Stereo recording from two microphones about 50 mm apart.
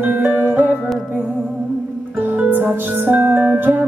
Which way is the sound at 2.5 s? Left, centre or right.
Right.